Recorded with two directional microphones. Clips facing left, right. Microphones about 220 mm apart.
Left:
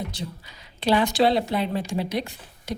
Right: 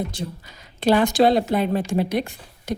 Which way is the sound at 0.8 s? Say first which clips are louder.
Right 4 dB; 45° right (ahead or behind).